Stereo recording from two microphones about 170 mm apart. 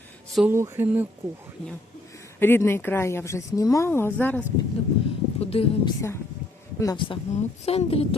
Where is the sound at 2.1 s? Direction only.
15° left (ahead or behind).